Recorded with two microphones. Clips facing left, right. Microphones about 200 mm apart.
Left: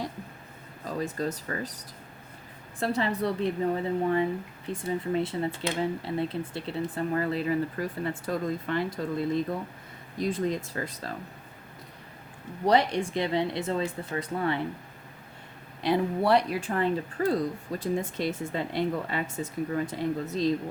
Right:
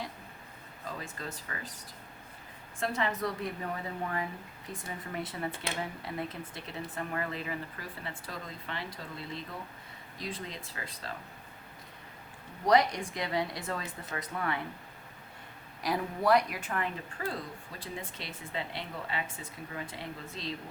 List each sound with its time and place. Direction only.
0.9 s speech: 40° left (ahead or behind)
2.8 s speech: 35° left (ahead or behind)
12.6 s speech: 30° left (ahead or behind)
15.8 s speech: 30° left (ahead or behind)